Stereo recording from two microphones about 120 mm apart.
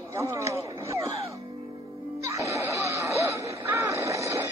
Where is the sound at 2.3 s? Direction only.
25° right (ahead or behind).